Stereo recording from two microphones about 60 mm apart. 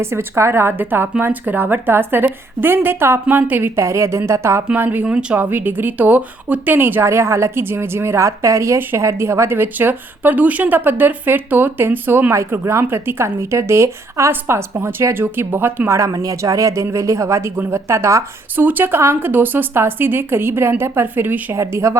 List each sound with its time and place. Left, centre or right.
0.0 s a woman's voice: right
3.8 s speech: right
4.7 s a woman's voice: right
7.0 s a woman's voice: right
16.0 s speech: right
18.5 s a woman's voice: right
21.5 s speech: right